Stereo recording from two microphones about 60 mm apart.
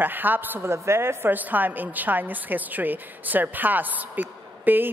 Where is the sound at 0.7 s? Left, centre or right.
Right.